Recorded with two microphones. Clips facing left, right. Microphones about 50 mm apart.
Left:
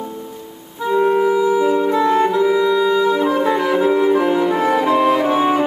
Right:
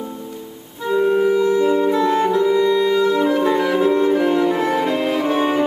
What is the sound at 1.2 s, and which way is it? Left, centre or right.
Saxophone, centre.